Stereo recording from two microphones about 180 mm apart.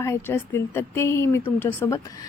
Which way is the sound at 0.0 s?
15° left (ahead or behind).